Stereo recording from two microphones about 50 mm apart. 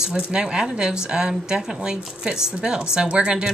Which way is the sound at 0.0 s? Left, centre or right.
Centre.